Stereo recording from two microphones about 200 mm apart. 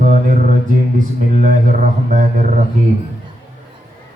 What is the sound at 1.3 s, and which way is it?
A man's voice, 40° right (ahead or behind).